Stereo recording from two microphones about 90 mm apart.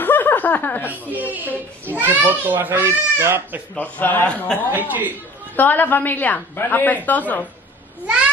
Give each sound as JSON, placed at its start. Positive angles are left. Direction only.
{"t": 0.0, "sound": "chuckle", "side_deg": 20}
{"t": 1.1, "sound": "a child's voice", "side_deg": -20}
{"t": 3.7, "sound": "a man's voice", "side_deg": 20}
{"t": 4.6, "sound": "a child's voice", "side_deg": -20}
{"t": 5.6, "sound": "a woman's voice", "side_deg": 20}